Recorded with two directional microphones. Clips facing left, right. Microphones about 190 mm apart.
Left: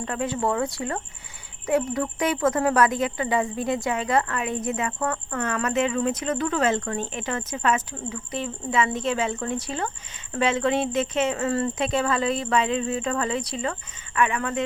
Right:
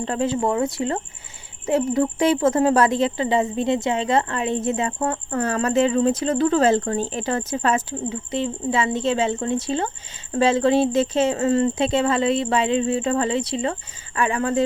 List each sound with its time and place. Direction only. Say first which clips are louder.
0.0 s a woman's voice: right 4 dB; 30° right (ahead or behind)